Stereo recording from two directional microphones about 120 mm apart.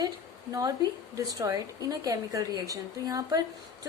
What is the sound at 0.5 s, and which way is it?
A woman's voice, 30° right (ahead or behind).